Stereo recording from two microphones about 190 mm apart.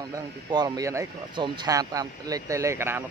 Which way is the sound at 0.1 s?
20° right (ahead or behind).